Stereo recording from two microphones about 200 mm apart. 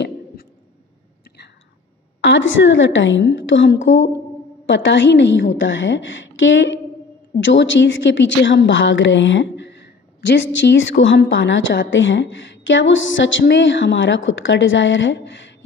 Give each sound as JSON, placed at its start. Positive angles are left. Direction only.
{"t": 2.2, "sound": "a woman's voice", "side_deg": 65}